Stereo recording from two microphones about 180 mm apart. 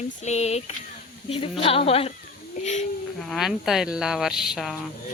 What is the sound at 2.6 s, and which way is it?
Snake, 40° left (ahead or behind).